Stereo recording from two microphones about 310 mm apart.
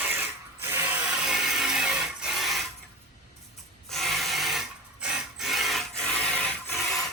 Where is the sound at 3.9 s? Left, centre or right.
Centre.